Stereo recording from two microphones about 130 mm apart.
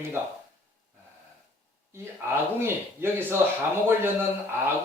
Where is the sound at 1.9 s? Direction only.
20° right (ahead or behind).